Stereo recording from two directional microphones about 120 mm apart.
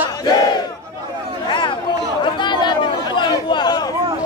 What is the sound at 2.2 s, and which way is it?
Chatter, 40° left (ahead or behind).